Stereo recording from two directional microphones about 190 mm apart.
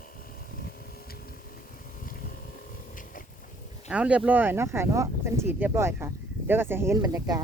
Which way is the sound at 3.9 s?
5° right (ahead or behind).